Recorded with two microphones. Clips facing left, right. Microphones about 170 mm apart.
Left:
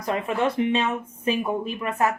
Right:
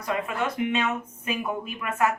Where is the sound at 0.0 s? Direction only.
30° left (ahead or behind).